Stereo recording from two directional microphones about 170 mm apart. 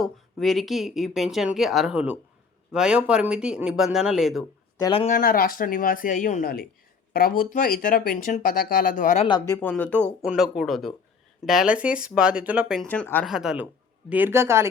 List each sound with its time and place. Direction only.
0.0 s speech: centre (ahead or behind)
4.8 s speech: 30° left (ahead or behind)
5.0 s speech: 55° left (ahead or behind)
9.5 s speech: 10° left (ahead or behind)
13.2 s speech: 5° right (ahead or behind)